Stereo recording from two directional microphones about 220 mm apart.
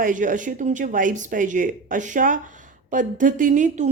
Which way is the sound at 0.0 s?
35° right (ahead or behind).